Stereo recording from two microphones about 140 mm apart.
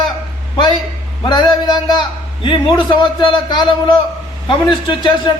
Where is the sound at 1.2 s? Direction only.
35° left (ahead or behind).